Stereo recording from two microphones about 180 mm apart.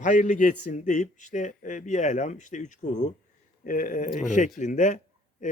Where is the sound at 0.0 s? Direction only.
45° left (ahead or behind).